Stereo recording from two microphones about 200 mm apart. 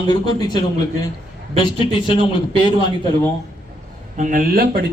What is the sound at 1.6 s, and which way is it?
Speech, 25° left (ahead or behind).